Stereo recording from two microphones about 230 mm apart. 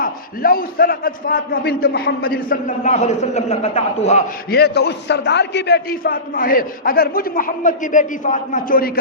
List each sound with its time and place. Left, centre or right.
0.0 s a man's voice: left
4.5 s a man's voice: left